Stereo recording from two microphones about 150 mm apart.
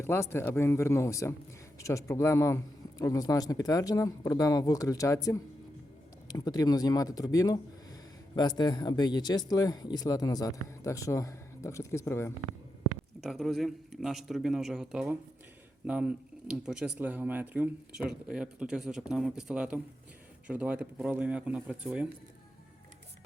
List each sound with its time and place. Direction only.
0.0 s speech: 15° left (ahead or behind)
13.2 s speech: centre (ahead or behind)